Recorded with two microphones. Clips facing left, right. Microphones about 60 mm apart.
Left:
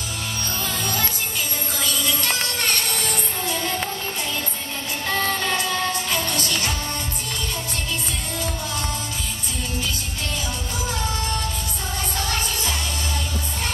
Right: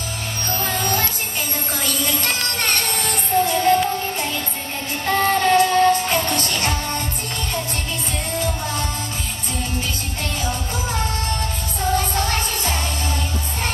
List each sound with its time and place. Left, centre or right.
0.7 s music: right
5.0 s music: right
12.2 s music: right